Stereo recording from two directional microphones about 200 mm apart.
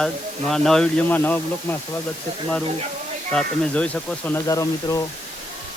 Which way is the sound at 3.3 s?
5° left (ahead or behind).